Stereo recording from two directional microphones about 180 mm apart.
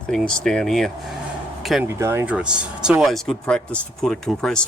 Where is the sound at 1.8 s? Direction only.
15° right (ahead or behind).